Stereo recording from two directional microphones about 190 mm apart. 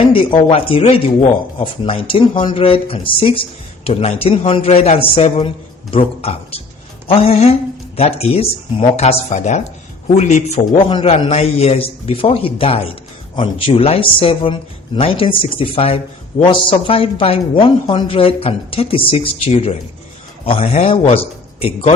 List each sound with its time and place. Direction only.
0.0 s a man's voice: 30° left (ahead or behind)